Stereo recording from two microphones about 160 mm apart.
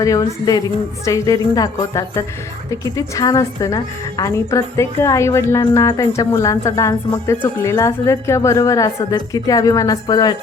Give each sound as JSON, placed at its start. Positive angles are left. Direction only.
{"t": 0.0, "sound": "a woman's voice", "side_deg": 20}